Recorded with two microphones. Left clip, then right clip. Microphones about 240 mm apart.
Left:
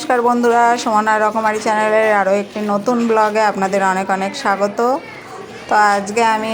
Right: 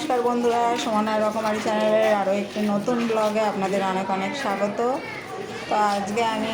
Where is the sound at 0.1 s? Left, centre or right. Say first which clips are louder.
Left 9 dB; left.